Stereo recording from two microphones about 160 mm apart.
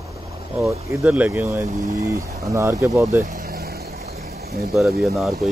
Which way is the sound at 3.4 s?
70° right (ahead or behind).